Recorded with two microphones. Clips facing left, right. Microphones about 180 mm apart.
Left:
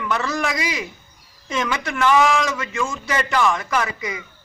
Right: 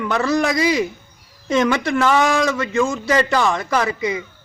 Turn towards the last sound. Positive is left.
turn(degrees=-30)  # may be behind; listen again after turning